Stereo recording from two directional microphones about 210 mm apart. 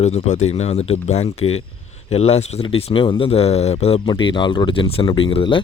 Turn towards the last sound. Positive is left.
turn(degrees=25)  # may be behind; listen again after turning